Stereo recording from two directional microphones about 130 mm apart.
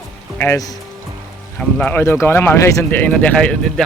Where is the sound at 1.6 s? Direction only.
10° left (ahead or behind).